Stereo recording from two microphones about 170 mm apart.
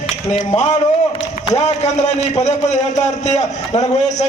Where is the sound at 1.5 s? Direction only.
40° left (ahead or behind).